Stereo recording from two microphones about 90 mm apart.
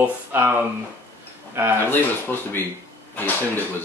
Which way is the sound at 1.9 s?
25° left (ahead or behind).